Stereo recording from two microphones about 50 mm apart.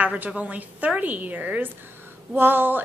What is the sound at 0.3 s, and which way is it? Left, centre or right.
A woman's voice, right.